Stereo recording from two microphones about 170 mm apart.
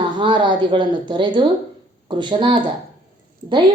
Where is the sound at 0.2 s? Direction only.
25° right (ahead or behind).